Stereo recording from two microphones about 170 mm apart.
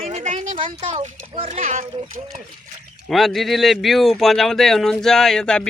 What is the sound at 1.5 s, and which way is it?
Speech, 45° right (ahead or behind).